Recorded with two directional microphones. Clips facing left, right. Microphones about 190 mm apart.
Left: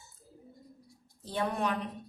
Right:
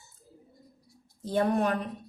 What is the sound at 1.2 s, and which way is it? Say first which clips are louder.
Speech: right 6 dB; 45° right (ahead or behind).